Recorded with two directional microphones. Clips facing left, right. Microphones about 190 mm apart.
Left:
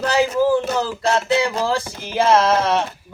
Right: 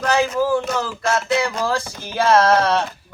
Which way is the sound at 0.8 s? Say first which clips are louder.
Left 2 dB; 30° left (ahead or behind).